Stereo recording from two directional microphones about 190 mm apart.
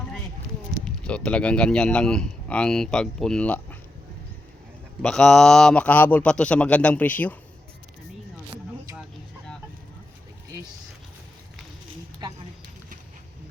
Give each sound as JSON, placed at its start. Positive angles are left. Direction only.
{"t": 0.9, "sound": "speech", "side_deg": 5}
{"t": 5.0, "sound": "speech", "side_deg": 5}
{"t": 12.2, "sound": "a sound", "side_deg": -25}